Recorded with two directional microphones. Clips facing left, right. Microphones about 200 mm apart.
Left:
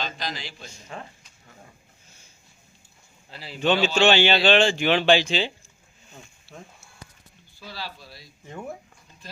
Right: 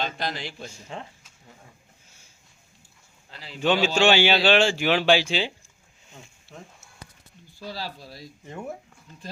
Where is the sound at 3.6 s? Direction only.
10° right (ahead or behind).